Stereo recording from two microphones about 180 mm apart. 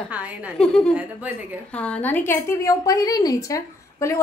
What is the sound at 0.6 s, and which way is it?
A woman's voice, 5° left (ahead or behind).